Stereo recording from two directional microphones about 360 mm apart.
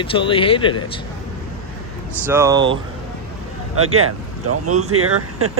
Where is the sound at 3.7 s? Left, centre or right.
Right.